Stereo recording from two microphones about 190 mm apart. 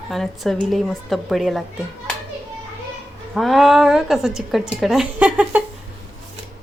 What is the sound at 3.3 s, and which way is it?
A woman's voice, centre (ahead or behind).